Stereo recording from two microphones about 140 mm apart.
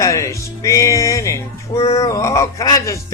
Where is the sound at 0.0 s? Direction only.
20° left (ahead or behind).